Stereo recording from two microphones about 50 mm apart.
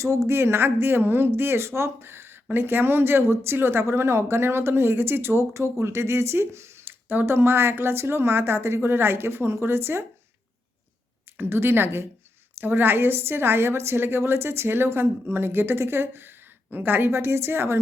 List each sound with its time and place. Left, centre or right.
0.3 s speech: right
5.7 s speech: right
7.1 s speech: right
7.3 s speech: right
11.3 s speech: right
17.1 s speech: right